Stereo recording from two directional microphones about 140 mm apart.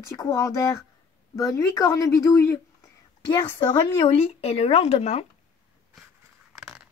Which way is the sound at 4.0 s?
45° left (ahead or behind).